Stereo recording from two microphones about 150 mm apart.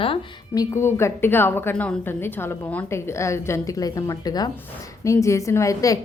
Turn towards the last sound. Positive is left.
turn(degrees=20)  # may be behind; listen again after turning